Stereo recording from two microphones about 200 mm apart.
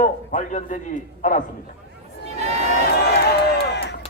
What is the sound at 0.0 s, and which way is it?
A man's voice, 40° left (ahead or behind).